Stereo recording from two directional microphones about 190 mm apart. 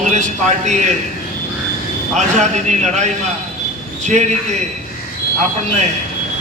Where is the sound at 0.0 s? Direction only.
40° right (ahead or behind).